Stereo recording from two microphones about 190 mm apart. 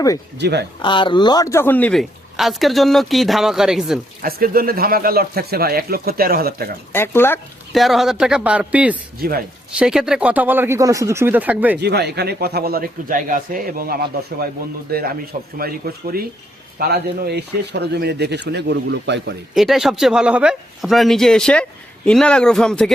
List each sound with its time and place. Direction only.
0.3 s speech: 60° right (ahead or behind)
0.8 s speech: 25° left (ahead or behind); by 4.0 s centre (ahead or behind)
4.2 s speech: 50° right (ahead or behind)
6.9 s speech: 10° left (ahead or behind)
7.7 s speech: centre (ahead or behind)
9.1 s speech: 50° right (ahead or behind)
9.7 s speech: 5° right (ahead or behind)
11.8 s speech: 60° right (ahead or behind)
19.5 s speech: centre (ahead or behind)